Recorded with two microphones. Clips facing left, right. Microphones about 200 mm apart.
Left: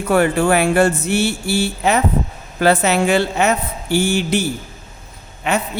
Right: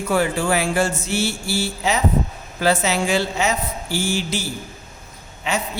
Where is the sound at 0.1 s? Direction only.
60° left (ahead or behind).